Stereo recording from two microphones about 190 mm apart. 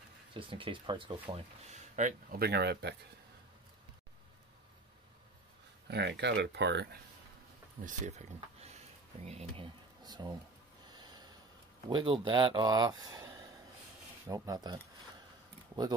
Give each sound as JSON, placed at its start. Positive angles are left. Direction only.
{"t": 0.3, "sound": "speech", "side_deg": -25}
{"t": 2.4, "sound": "speech", "side_deg": -60}
{"t": 5.9, "sound": "speech", "side_deg": -60}
{"t": 7.8, "sound": "speech", "side_deg": -40}
{"t": 10.0, "sound": "speech", "side_deg": -20}
{"t": 10.9, "sound": "snort", "side_deg": -20}
{"t": 11.9, "sound": "speech", "side_deg": -25}